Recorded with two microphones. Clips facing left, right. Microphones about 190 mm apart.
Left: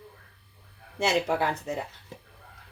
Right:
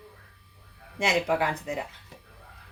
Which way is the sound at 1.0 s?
15° right (ahead or behind).